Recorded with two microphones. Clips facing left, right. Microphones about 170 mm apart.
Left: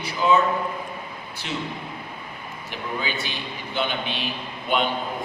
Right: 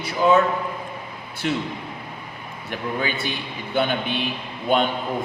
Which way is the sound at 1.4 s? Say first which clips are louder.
Right 7 dB; 45° right (ahead or behind).